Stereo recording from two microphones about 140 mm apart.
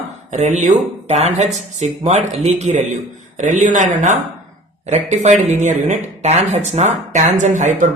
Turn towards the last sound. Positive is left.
turn(degrees=-60)  # may be behind; listen again after turning